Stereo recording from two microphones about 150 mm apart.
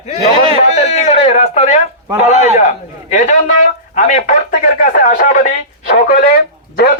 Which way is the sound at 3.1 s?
55° left (ahead or behind).